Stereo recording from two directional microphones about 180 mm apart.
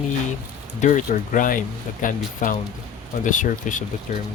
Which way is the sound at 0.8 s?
45° left (ahead or behind).